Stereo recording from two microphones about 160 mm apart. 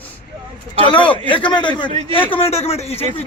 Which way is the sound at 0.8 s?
30° left (ahead or behind).